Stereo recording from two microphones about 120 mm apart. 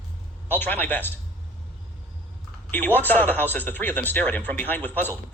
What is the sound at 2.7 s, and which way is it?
Speech, 15° left (ahead or behind).